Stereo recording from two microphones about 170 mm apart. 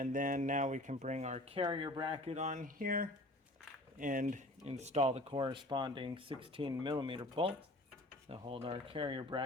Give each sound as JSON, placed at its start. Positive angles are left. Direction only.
{"t": 0.0, "sound": "speech", "side_deg": -55}
{"t": 2.3, "sound": "speech", "side_deg": -45}